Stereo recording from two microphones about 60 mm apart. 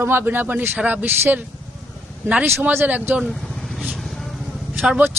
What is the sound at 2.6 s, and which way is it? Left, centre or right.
Speech, right.